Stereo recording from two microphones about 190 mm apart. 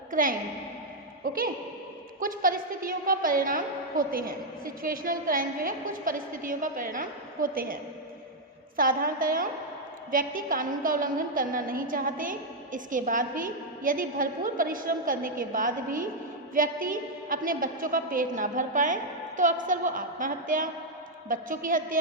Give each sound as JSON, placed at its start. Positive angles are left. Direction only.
{"t": 0.1, "sound": "a woman's voice", "side_deg": -45}